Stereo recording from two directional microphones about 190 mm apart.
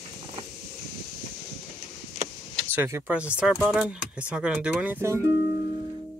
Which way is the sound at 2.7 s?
10° right (ahead or behind).